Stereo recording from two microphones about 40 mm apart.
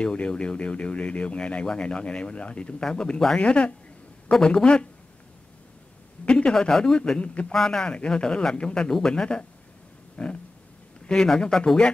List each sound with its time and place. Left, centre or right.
0.0 s speech: left
6.2 s speech: left
7.5 s speech: centre
7.8 s speech: left